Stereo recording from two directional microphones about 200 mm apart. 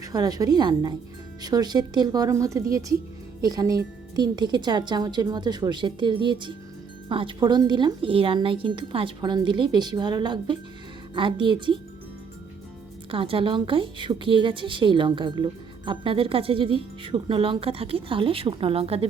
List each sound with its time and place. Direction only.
0.0 s a woman's voice: 20° right (ahead or behind)
13.1 s a woman's voice: 25° right (ahead or behind)